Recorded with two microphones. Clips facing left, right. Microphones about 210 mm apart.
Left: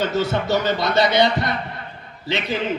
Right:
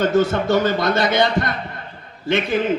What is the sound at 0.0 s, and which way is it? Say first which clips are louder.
A man's voice: right 4 dB; 50° right (ahead or behind).